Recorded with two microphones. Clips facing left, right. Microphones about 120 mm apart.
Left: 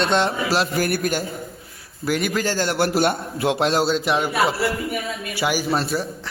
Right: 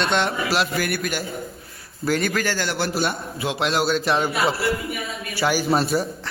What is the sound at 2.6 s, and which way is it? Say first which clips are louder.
A man's voice: left 4 dB; 50° left (ahead or behind).